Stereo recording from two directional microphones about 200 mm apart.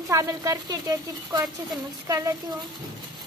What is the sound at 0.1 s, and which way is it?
A woman's voice, 15° right (ahead or behind).